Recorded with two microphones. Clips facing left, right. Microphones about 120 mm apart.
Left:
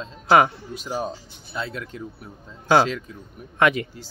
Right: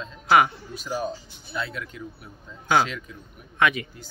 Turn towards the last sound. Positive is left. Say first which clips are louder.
# left 3 dB
turn(degrees=35)  # may be behind; listen again after turning